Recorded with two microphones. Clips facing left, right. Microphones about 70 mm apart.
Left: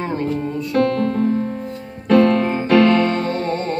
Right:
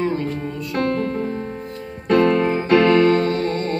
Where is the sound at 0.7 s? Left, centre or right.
Centre.